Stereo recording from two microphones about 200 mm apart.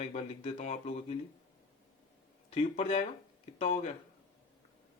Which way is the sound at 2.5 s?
30° left (ahead or behind).